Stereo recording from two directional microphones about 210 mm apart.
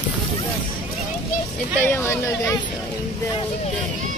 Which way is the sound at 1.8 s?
10° left (ahead or behind).